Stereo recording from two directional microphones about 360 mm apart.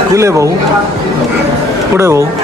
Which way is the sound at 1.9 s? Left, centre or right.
Centre.